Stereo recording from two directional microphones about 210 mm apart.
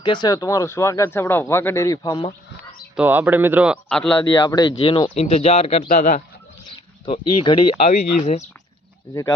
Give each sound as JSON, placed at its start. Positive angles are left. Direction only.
{"t": 0.0, "sound": "speech", "side_deg": 20}
{"t": 2.9, "sound": "speech", "side_deg": -10}
{"t": 3.8, "sound": "speech", "side_deg": 5}
{"t": 4.4, "sound": "speech", "side_deg": 20}
{"t": 6.7, "sound": "speech", "side_deg": 25}